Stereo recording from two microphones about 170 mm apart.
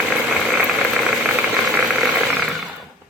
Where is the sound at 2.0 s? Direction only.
5° right (ahead or behind).